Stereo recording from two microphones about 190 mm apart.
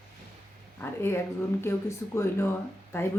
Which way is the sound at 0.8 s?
10° left (ahead or behind).